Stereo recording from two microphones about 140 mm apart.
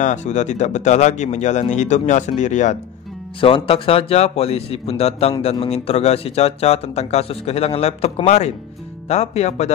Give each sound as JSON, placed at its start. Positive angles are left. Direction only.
{"t": 0.0, "sound": "speech", "side_deg": 60}
{"t": 3.3, "sound": "speech", "side_deg": 40}